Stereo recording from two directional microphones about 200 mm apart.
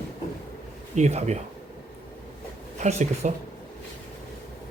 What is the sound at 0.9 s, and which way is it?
Speech, 35° right (ahead or behind).